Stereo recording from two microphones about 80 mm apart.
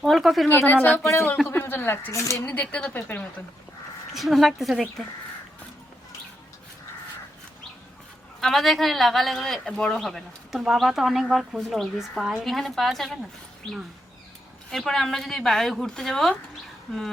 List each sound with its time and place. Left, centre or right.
0.0 s a woman's voice: centre
0.4 s speech: left
2.1 s speech: left
2.5 s speech: centre
4.1 s a woman's voice: centre
8.4 s a woman's voice: centre
14.7 s a woman's voice: centre